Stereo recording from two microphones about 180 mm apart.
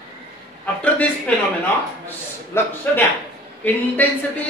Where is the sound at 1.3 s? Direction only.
5° left (ahead or behind).